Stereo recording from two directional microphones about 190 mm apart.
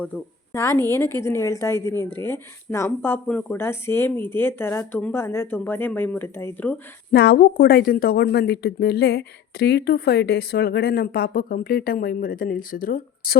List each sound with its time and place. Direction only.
0.5 s a woman's voice: 15° left (ahead or behind)
7.1 s speech: 60° left (ahead or behind)